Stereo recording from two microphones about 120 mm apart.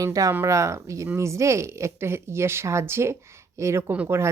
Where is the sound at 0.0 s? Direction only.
30° right (ahead or behind).